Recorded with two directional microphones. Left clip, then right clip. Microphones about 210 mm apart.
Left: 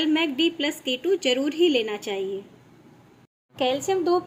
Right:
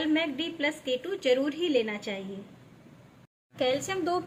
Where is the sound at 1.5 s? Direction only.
90° left.